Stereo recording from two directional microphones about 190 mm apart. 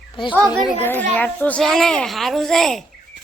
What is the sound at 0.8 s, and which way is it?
A child's voice, 10° left (ahead or behind).